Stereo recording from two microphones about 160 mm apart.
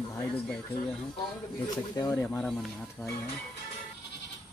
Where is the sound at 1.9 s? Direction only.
20° left (ahead or behind).